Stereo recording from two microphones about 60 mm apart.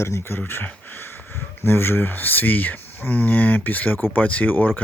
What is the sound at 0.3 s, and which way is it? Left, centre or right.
Speech, left.